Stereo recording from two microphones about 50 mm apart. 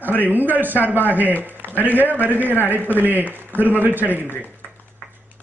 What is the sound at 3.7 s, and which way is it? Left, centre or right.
Speech, right.